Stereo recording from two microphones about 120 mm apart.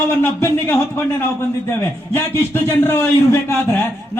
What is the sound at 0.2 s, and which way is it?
A man's voice, 15° left (ahead or behind).